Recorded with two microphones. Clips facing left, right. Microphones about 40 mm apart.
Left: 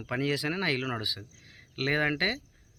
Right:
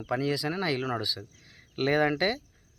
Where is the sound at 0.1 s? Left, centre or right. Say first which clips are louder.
Right 1 dB; left.